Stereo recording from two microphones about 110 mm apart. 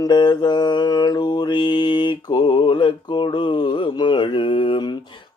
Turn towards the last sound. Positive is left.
turn(degrees=45)  # may be behind; listen again after turning